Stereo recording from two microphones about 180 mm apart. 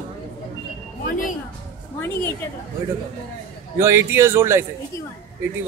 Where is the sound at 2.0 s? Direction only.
10° left (ahead or behind).